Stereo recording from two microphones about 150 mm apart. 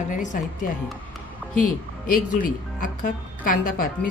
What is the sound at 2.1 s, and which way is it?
A woman's voice, 65° left (ahead or behind).